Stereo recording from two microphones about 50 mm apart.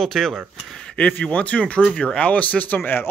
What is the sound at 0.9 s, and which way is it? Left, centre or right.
Speech, left.